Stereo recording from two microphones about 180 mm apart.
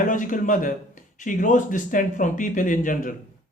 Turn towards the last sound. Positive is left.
turn(degrees=45)  # may be behind; listen again after turning